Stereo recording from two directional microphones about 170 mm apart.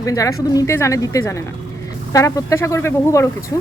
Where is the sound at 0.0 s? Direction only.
20° left (ahead or behind).